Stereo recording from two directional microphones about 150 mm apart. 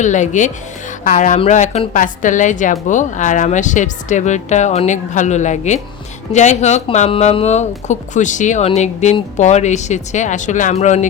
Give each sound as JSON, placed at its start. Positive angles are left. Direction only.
{"t": 0.0, "sound": "speech", "side_deg": 55}